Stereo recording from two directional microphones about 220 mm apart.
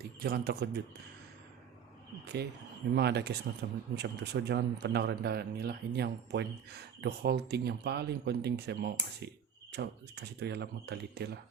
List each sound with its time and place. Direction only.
0.0 s speech: 45° right (ahead or behind)
2.2 s speech: 50° right (ahead or behind)